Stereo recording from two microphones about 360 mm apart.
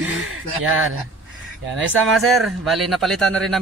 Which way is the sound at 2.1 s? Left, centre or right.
Centre.